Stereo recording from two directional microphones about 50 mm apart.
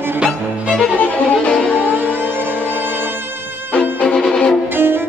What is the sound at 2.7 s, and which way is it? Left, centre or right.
Violin, right.